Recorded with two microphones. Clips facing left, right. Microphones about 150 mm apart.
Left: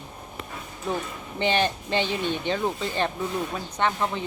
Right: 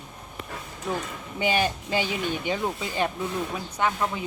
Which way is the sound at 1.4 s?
10° right (ahead or behind).